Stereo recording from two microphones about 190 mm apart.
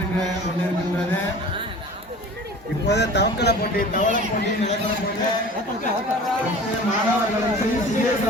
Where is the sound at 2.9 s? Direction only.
60° left (ahead or behind).